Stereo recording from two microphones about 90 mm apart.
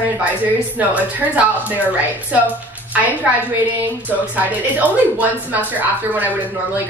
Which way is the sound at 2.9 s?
15° right (ahead or behind).